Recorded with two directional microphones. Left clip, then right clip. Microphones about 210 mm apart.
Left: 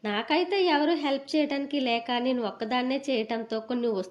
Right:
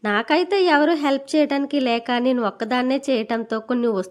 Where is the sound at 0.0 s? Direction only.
30° right (ahead or behind).